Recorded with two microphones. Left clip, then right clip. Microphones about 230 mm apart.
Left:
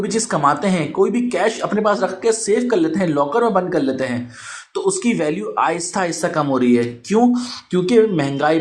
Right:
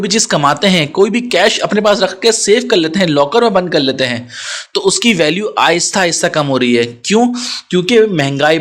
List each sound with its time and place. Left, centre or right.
0.0 s speech: right
1.5 s speech: right
2.2 s speech: right
5.1 s speech: right